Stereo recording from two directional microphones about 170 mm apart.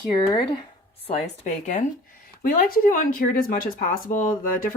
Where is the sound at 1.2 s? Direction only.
45° left (ahead or behind).